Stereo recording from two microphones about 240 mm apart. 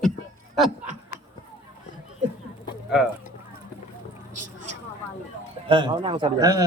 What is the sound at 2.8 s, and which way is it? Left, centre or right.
Speech, centre.